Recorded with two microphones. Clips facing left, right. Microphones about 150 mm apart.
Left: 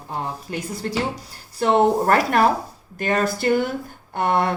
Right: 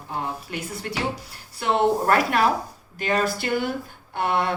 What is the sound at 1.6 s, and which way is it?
Speech, 40° left (ahead or behind).